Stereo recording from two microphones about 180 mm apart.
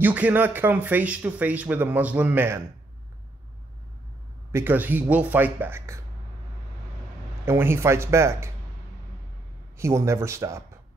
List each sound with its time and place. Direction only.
0.0 s speech: 10° right (ahead or behind)
4.5 s speech: 15° right (ahead or behind)
7.4 s speech: 15° right (ahead or behind)
9.8 s speech: 15° right (ahead or behind)